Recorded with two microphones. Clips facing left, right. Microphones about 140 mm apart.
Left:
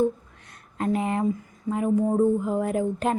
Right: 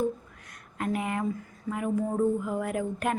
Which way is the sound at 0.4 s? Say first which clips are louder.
Left 5 dB; 25° left (ahead or behind).